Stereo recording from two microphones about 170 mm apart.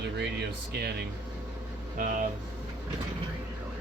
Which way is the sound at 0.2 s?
70° right (ahead or behind).